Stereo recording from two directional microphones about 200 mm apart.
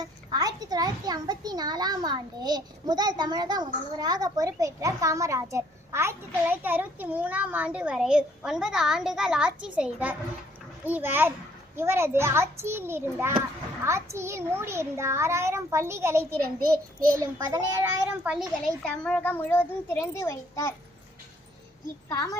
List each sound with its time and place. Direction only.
0.0 s a child's voice: 20° right (ahead or behind)
16.4 s a child's voice: 50° right (ahead or behind)
17.1 s a child's voice: 15° right (ahead or behind); by 20.7 s 15° left (ahead or behind)
22.1 s a child's voice: 15° left (ahead or behind)